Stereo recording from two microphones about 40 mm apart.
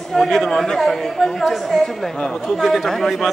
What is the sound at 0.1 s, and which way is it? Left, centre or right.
Speech, centre.